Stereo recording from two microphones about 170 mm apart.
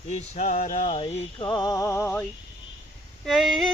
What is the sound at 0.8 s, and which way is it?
Speech, 25° left (ahead or behind).